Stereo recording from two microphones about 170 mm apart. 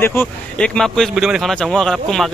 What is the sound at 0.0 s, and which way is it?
Speech, 10° left (ahead or behind).